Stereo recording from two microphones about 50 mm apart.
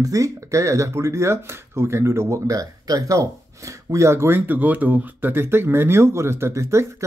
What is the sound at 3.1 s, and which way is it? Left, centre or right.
Speech, right.